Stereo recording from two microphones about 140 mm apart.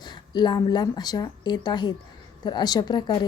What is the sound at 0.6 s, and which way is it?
A woman's voice, 30° left (ahead or behind).